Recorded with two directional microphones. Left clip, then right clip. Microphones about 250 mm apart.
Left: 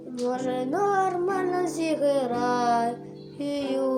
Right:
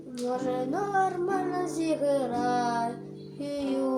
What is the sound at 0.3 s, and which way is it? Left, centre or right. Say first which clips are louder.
Music: left 1 dB; left.